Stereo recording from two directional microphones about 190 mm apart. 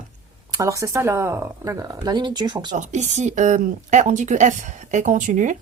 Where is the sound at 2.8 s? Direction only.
40° right (ahead or behind).